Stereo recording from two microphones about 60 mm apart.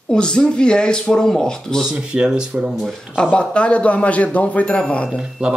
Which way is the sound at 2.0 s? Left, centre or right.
Centre.